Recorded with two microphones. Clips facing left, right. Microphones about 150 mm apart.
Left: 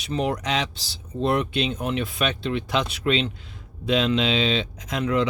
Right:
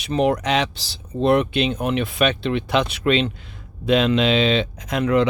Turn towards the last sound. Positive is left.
turn(degrees=-60)  # may be behind; listen again after turning